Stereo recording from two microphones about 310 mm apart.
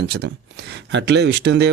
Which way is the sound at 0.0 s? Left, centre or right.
Right.